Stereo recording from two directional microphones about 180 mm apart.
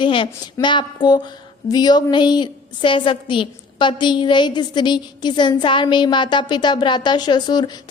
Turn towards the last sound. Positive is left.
turn(degrees=25)  # may be behind; listen again after turning